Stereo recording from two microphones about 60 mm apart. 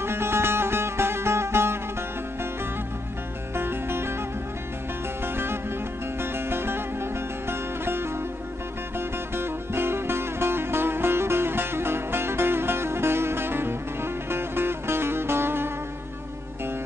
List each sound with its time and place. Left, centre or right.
0.0 s music: right
3.5 s music: right
5.2 s music: right
9.3 s music: right